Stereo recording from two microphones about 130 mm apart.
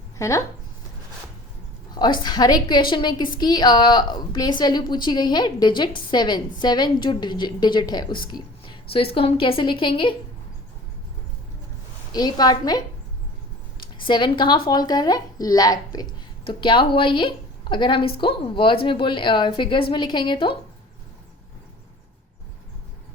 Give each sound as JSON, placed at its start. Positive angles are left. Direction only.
{"t": 0.2, "sound": "speech", "side_deg": 25}
{"t": 2.0, "sound": "a woman's voice", "side_deg": 35}
{"t": 12.1, "sound": "a woman's voice", "side_deg": 30}
{"t": 14.0, "sound": "a woman's voice", "side_deg": 35}